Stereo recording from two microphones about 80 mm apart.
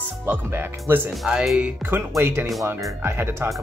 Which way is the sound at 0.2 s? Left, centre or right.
Right.